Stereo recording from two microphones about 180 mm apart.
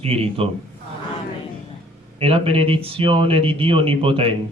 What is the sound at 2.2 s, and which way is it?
A man's voice, 30° right (ahead or behind).